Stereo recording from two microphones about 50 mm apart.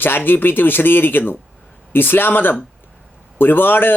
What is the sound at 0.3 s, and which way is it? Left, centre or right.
Speech, left.